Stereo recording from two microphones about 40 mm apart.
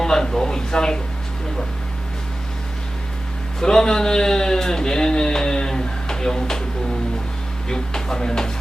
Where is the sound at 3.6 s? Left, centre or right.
Centre.